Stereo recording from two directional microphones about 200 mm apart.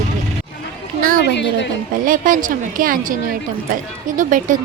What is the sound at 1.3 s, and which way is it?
Speech, 60° left (ahead or behind).